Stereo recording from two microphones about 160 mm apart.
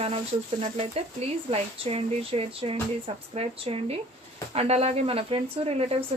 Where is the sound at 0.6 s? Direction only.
40° right (ahead or behind).